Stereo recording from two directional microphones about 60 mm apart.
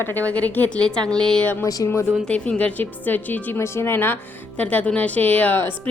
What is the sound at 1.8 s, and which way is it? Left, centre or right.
Speech, left.